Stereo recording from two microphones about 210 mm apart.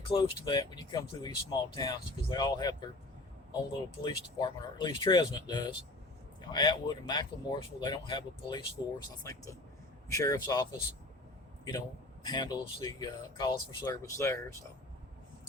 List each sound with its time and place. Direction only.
0.0 s speech: 20° left (ahead or behind)
4.0 s speech: 20° left (ahead or behind)
12.2 s speech: 20° left (ahead or behind)